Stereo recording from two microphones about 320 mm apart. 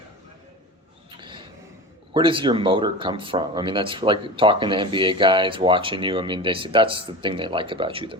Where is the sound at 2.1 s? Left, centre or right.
Centre.